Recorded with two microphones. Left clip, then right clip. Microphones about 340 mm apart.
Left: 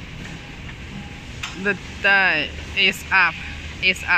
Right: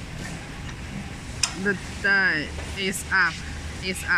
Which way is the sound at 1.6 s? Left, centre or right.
Centre.